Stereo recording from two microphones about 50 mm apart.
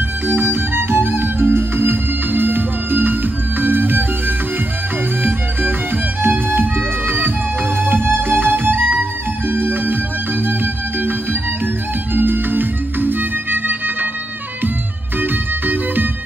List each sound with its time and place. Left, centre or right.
0.3 s music: right
5.2 s music: right
15.1 s music: right